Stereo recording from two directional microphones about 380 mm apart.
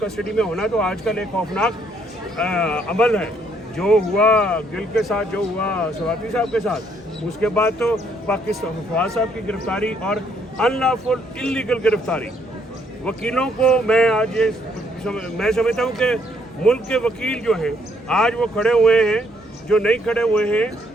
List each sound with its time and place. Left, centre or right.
0.0 s speech: centre